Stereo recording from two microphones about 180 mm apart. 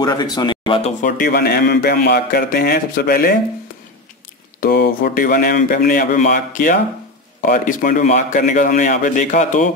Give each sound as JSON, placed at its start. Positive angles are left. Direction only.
{"t": 0.0, "sound": "speech", "side_deg": 25}
{"t": 1.0, "sound": "a man's voice", "side_deg": 50}
{"t": 4.6, "sound": "speech", "side_deg": 60}